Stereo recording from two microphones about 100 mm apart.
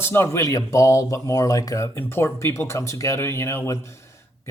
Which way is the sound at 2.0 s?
25° left (ahead or behind).